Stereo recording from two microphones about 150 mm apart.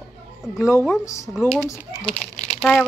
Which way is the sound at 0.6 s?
20° left (ahead or behind).